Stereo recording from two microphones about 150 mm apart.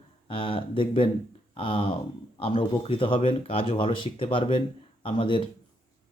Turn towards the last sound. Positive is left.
turn(degrees=35)  # may be behind; listen again after turning